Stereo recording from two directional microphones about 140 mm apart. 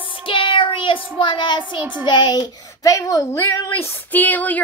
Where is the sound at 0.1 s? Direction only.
35° left (ahead or behind).